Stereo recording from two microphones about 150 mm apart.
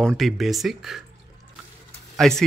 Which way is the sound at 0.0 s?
Centre (ahead or behind).